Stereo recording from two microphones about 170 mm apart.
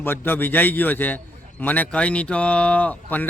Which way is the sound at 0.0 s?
10° left (ahead or behind).